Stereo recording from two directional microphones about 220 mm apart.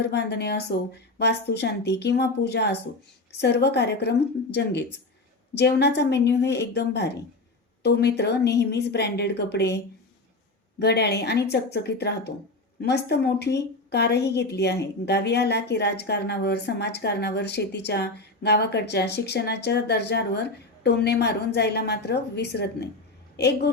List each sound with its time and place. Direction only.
0.0 s speech: 50° left (ahead or behind)
10.8 s speech: 50° left (ahead or behind)